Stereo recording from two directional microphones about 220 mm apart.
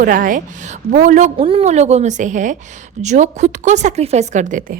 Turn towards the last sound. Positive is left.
turn(degrees=-35)  # may be behind; listen again after turning